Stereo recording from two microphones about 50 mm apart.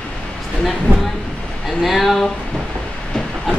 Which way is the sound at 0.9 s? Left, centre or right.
Right.